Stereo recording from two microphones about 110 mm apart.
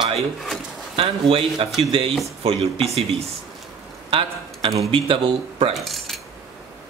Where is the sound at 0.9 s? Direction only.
55° right (ahead or behind).